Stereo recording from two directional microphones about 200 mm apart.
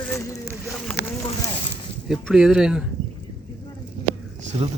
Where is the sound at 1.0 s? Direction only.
50° left (ahead or behind).